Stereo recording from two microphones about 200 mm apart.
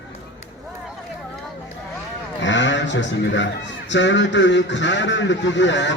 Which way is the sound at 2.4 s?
65° left (ahead or behind).